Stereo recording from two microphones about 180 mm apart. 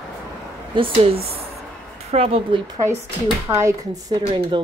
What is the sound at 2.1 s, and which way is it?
Speech, 35° right (ahead or behind).